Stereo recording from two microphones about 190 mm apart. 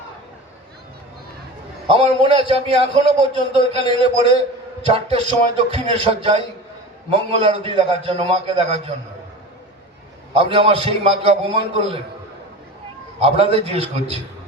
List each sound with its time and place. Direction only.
1.9 s a man's voice: 30° right (ahead or behind)
10.3 s a man's voice: 30° right (ahead or behind)
13.1 s a man's voice: 30° right (ahead or behind)